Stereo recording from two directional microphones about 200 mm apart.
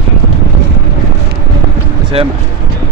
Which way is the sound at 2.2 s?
30° right (ahead or behind).